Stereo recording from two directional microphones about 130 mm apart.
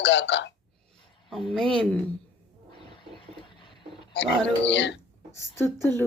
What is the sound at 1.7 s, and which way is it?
Speech, 5° left (ahead or behind).